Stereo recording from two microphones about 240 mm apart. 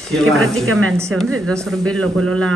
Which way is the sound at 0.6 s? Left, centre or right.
Right.